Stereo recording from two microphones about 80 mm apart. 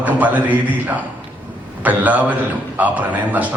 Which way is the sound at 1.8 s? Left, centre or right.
Right.